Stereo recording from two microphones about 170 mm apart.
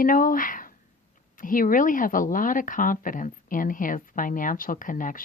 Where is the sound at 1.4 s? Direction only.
55° left (ahead or behind).